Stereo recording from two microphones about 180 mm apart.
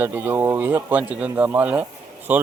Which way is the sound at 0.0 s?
10° right (ahead or behind).